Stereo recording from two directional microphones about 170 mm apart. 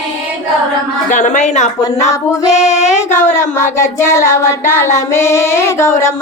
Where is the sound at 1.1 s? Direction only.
45° left (ahead or behind).